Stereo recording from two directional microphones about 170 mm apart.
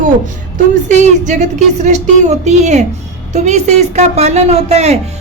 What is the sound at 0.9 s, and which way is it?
A woman's voice, 45° right (ahead or behind).